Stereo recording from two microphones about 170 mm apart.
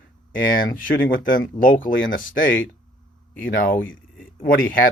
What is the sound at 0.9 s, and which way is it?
Speech, 55° left (ahead or behind).